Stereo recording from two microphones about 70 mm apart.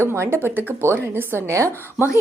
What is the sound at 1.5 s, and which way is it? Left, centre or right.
Speech, right.